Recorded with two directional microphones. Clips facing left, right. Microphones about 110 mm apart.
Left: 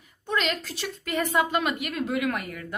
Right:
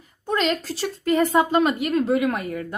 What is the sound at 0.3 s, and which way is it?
A woman's voice, 35° right (ahead or behind).